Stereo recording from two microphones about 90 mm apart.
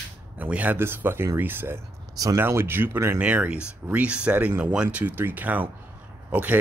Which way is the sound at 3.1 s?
15° right (ahead or behind).